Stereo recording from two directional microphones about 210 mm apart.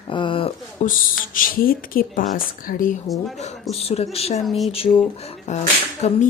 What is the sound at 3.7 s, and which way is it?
Speech, 30° left (ahead or behind).